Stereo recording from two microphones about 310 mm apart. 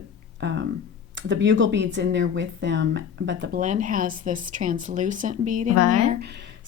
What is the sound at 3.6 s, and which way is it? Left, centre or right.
Speech, right.